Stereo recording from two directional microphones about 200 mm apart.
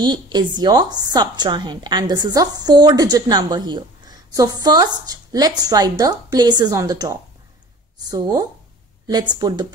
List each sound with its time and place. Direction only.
0.0 s a woman's voice: 20° right (ahead or behind)